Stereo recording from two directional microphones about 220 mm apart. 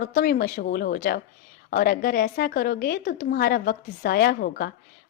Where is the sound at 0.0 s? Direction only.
40° left (ahead or behind).